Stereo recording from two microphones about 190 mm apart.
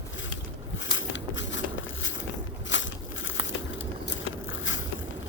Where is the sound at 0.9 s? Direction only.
75° left (ahead or behind).